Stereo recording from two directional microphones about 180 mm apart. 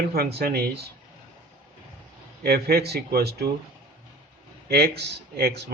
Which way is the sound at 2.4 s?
60° right (ahead or behind).